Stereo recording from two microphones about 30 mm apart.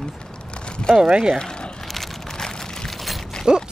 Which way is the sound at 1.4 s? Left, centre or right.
Left.